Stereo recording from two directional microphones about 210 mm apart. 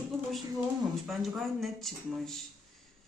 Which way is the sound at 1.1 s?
Centre (ahead or behind).